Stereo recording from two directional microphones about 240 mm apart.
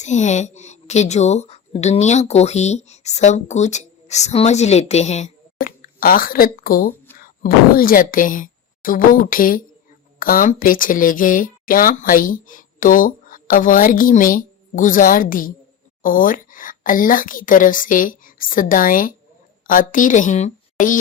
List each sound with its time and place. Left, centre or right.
0.0 s a woman's voice: left